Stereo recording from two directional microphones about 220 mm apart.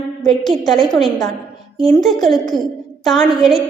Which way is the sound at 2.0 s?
Centre (ahead or behind).